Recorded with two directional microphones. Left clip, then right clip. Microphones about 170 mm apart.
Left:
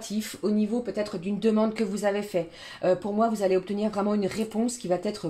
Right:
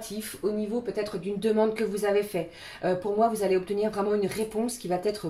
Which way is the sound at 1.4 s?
35° left (ahead or behind).